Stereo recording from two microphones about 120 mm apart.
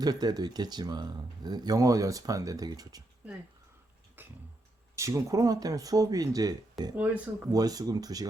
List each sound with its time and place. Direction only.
0.0 s speech: 35° right (ahead or behind)
4.2 s a sound: 15° right (ahead or behind)
4.9 s speech: 25° right (ahead or behind)
6.9 s speech: 15° right (ahead or behind)
7.5 s speech: 30° right (ahead or behind)